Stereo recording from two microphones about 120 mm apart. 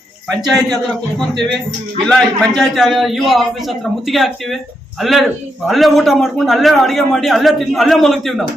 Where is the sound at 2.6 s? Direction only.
Centre (ahead or behind).